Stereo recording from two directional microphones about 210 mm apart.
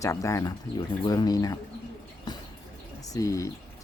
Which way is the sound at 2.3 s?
20° left (ahead or behind).